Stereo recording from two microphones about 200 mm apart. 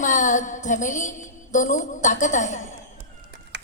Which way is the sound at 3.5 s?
60° right (ahead or behind).